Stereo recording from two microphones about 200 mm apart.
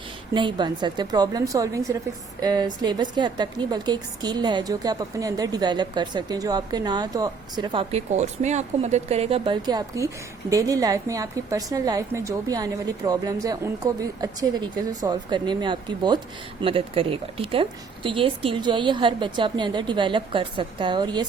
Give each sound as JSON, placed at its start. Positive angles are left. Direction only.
{"t": 0.3, "sound": "a woman's voice", "side_deg": -25}